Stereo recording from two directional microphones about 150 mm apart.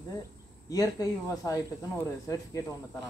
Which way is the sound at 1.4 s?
20° left (ahead or behind).